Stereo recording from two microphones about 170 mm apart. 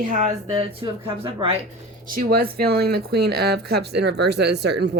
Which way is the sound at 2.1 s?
60° right (ahead or behind).